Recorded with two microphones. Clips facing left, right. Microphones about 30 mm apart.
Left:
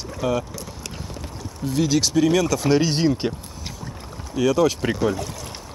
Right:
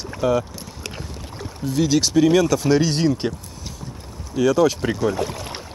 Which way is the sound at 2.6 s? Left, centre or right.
Centre.